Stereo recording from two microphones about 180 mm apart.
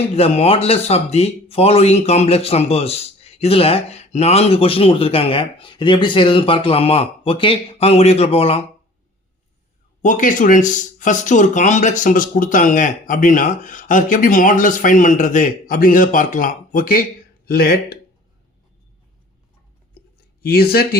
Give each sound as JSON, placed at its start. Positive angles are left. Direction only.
{"t": 0.1, "sound": "speech", "side_deg": 35}
{"t": 10.0, "sound": "speech", "side_deg": 45}
{"t": 20.4, "sound": "speech", "side_deg": 60}